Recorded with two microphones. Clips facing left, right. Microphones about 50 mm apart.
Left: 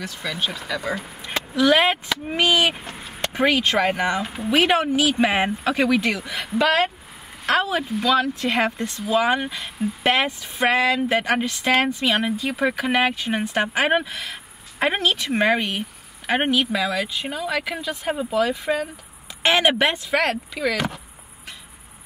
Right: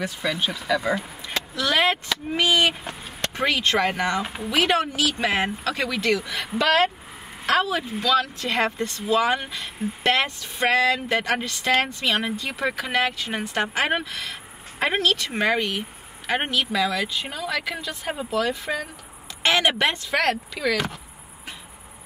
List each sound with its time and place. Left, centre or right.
0.2 s speech: centre
1.2 s speech: centre
8.0 s speech: centre